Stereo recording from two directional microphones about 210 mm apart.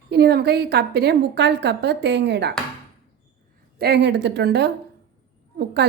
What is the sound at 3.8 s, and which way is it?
A woman's voice, 55° right (ahead or behind).